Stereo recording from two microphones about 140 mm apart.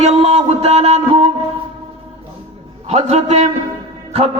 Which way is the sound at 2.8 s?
50° right (ahead or behind).